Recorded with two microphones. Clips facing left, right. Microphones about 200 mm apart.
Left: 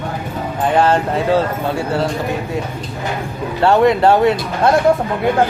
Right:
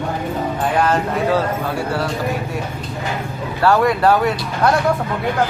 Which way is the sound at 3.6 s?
25° left (ahead or behind).